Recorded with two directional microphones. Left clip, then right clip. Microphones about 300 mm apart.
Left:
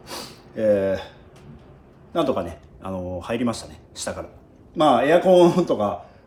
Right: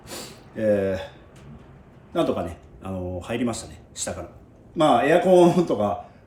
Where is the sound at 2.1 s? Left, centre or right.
Centre.